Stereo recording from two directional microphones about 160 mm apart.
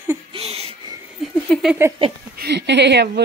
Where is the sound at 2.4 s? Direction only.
90° right.